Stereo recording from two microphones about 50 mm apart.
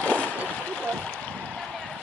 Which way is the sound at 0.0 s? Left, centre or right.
Left.